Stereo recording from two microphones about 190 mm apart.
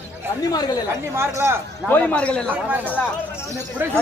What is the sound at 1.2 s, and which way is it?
Speech, 15° right (ahead or behind).